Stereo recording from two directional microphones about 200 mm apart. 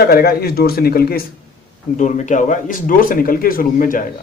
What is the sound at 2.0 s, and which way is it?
Speech, 40° left (ahead or behind).